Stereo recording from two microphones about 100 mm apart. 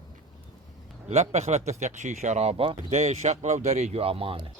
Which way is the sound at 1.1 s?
90° right.